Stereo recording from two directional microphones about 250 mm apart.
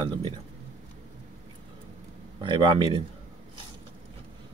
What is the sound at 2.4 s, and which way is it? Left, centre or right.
Speech, centre.